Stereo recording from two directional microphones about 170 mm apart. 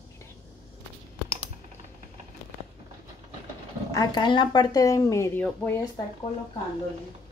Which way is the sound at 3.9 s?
25° left (ahead or behind).